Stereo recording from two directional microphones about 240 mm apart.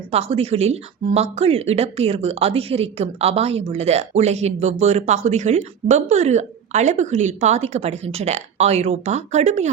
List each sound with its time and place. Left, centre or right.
0.1 s speech: right